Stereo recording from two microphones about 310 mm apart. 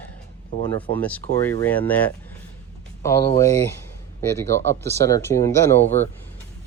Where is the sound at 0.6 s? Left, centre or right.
Centre.